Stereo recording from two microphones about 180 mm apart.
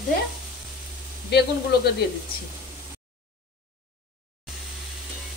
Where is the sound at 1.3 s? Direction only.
65° left (ahead or behind).